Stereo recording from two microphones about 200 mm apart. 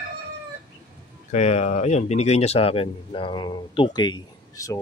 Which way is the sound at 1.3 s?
35° left (ahead or behind).